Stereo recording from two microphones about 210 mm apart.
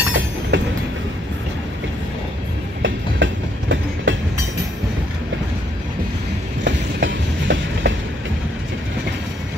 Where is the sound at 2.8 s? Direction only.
65° right (ahead or behind).